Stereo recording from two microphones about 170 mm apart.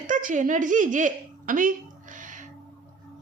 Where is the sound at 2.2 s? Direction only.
50° right (ahead or behind).